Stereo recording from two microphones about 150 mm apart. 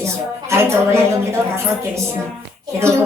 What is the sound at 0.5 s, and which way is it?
Speech, 15° right (ahead or behind).